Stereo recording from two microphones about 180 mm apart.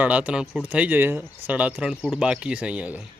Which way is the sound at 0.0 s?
5° right (ahead or behind).